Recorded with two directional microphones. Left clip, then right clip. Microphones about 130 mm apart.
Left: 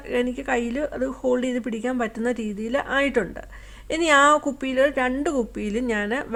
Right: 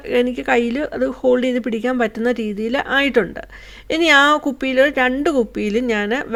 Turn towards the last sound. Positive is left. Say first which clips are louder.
# right 5 dB
turn(degrees=-30)  # may be behind; listen again after turning